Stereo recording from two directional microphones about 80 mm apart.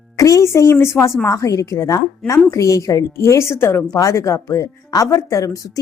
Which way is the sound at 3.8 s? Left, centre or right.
Left.